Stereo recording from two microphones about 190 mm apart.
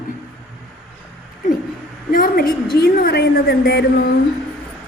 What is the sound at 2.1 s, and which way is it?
A woman's voice, 50° left (ahead or behind).